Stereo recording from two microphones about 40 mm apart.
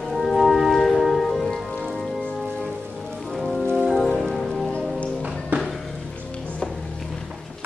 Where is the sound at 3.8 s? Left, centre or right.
Centre.